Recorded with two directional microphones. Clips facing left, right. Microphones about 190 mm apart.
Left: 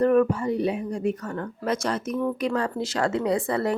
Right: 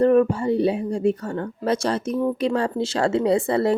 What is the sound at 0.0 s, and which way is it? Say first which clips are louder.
Speech: right 3 dB; 30° right (ahead or behind).